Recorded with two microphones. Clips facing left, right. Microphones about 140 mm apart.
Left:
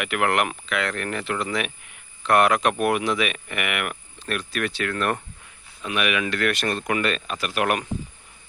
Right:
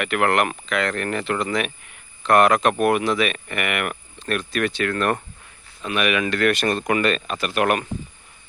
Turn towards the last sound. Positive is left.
turn(degrees=5)  # may be behind; listen again after turning